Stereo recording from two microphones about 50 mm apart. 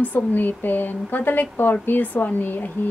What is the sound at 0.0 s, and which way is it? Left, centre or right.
Speech, left.